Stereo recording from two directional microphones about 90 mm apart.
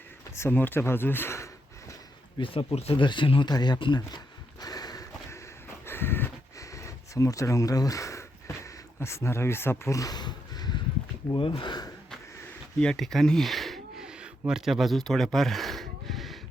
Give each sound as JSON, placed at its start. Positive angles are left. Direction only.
{"t": 0.3, "sound": "speech", "side_deg": 25}
{"t": 2.4, "sound": "speech", "side_deg": 75}
{"t": 3.5, "sound": "speech", "side_deg": 55}
{"t": 4.6, "sound": "clip-clop", "side_deg": 45}
{"t": 5.8, "sound": "a sound", "side_deg": 25}
{"t": 6.6, "sound": "a sound", "side_deg": 35}
{"t": 9.0, "sound": "speech", "side_deg": 30}
{"t": 11.3, "sound": "speech", "side_deg": 70}
{"t": 12.8, "sound": "a sound", "side_deg": 5}